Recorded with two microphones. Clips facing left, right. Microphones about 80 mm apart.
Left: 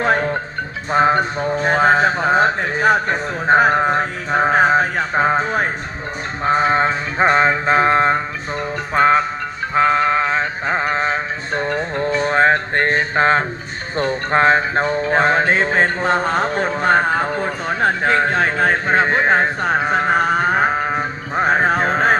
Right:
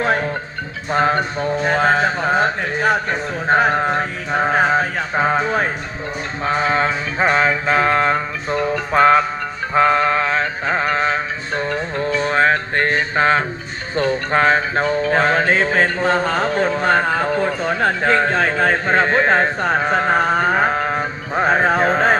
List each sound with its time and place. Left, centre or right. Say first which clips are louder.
0.0 s music: left 2 dB; left
2.8 s a man's voice: left 3 dB; left
3.7 s music: left 2 dB; left
8.7 s music: right 1 dB; centre
19.6 s a sound: even; centre